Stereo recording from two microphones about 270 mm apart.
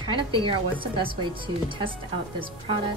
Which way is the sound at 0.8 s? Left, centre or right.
Centre.